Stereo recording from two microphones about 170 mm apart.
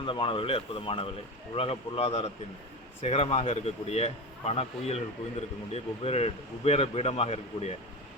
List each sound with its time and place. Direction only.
0.0 s speech: 30° left (ahead or behind)